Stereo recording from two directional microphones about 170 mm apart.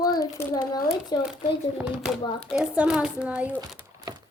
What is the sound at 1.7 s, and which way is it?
A child's voice, 5° right (ahead or behind).